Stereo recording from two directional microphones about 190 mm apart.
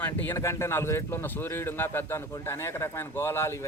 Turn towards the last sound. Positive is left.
turn(degrees=15)  # may be behind; listen again after turning